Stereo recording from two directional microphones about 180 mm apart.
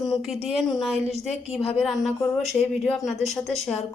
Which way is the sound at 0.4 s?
Centre (ahead or behind).